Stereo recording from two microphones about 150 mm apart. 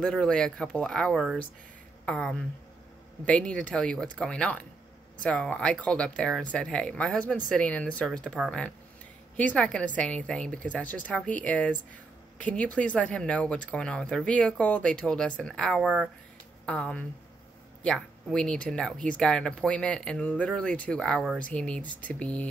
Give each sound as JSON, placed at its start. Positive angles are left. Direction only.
{"t": 0.0, "sound": "speech", "side_deg": 5}
{"t": 15.8, "sound": "speech", "side_deg": -10}
{"t": 16.6, "sound": "speech", "side_deg": 5}